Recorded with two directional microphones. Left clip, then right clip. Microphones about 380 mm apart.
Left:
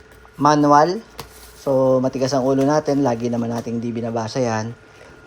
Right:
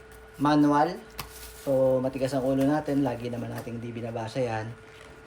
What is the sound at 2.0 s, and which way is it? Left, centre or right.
Speech, centre.